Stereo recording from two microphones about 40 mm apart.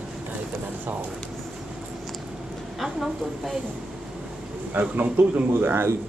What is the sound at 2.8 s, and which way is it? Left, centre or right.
Speech, centre.